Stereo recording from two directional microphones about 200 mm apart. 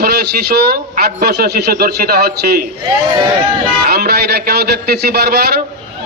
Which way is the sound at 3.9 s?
50° right (ahead or behind).